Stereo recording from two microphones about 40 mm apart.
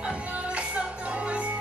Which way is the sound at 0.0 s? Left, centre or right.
Right.